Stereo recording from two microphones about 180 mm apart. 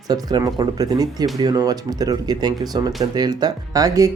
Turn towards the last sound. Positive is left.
turn(degrees=-20)  # may be behind; listen again after turning